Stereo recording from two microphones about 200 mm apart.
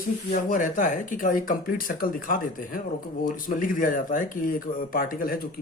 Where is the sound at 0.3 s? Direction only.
40° left (ahead or behind).